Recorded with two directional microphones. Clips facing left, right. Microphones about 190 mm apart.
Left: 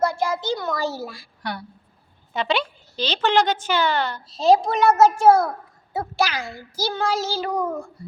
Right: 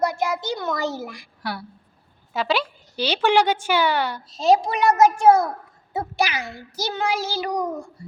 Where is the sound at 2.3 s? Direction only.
5° right (ahead or behind).